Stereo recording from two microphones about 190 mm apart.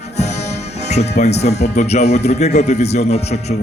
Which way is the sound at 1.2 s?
35° left (ahead or behind).